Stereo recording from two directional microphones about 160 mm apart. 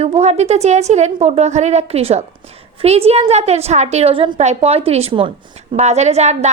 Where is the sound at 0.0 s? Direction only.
45° right (ahead or behind).